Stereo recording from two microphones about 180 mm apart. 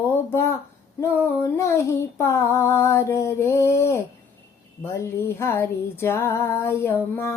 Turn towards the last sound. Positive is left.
turn(degrees=15)  # may be behind; listen again after turning